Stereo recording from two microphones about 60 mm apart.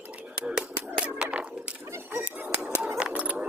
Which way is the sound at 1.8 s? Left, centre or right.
Right.